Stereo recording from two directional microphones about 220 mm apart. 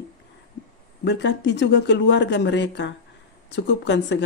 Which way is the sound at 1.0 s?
55° left (ahead or behind).